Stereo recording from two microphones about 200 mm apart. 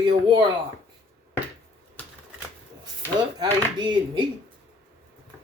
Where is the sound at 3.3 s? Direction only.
20° right (ahead or behind).